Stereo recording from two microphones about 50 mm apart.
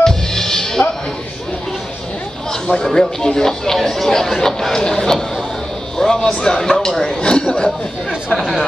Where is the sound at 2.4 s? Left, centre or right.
Centre.